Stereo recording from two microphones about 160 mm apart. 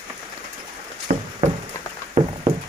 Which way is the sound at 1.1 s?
55° right (ahead or behind).